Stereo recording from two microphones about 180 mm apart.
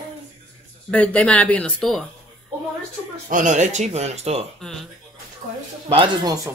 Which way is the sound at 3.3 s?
40° right (ahead or behind).